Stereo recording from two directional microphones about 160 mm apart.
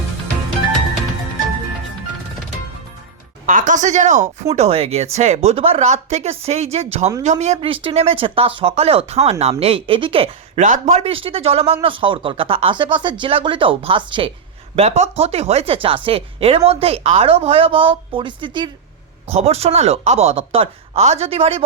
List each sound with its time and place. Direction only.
3.4 s speech: 55° right (ahead or behind); by 10.6 s 35° right (ahead or behind)
10.6 s speech: 50° right (ahead or behind); by 18.7 s 30° right (ahead or behind)
19.3 s speech: 45° right (ahead or behind)